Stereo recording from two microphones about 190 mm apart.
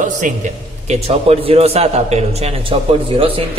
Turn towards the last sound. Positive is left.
turn(degrees=-30)  # may be behind; listen again after turning